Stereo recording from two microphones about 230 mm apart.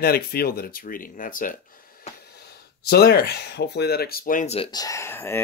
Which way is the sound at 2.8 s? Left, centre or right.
Left.